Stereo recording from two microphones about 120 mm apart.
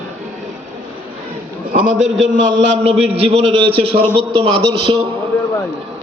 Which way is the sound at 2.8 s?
60° right (ahead or behind).